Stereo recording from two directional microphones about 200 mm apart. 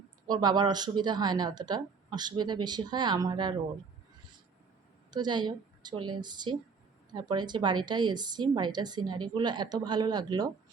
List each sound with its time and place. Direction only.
0.3 s a woman's voice: 20° right (ahead or behind)
5.1 s a woman's voice: 20° right (ahead or behind)